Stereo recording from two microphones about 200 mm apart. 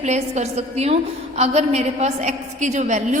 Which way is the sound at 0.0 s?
35° right (ahead or behind).